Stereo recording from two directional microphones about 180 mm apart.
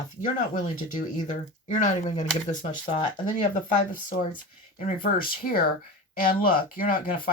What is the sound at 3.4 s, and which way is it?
Speech, 45° left (ahead or behind).